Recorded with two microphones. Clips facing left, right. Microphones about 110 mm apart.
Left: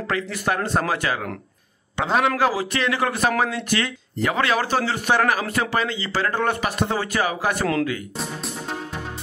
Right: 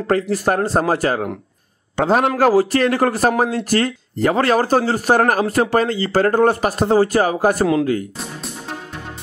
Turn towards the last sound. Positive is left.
turn(degrees=-40)  # may be behind; listen again after turning